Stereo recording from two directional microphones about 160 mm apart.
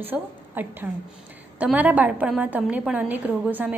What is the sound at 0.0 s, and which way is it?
A woman's voice, 10° right (ahead or behind).